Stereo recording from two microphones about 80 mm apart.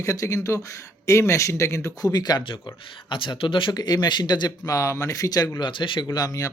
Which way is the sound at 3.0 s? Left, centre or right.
Left.